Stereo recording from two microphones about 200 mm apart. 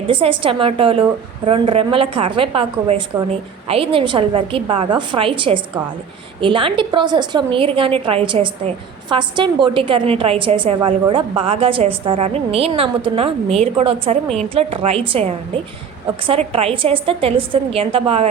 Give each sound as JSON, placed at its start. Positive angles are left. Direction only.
{"t": 0.1, "sound": "a woman's voice", "side_deg": -25}